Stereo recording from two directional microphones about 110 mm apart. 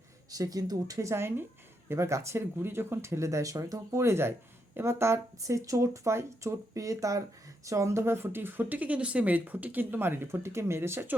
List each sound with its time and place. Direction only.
0.3 s speech: 35° right (ahead or behind)